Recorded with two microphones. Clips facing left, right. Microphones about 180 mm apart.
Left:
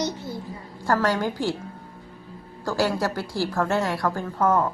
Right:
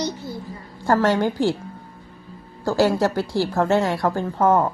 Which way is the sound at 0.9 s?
25° right (ahead or behind).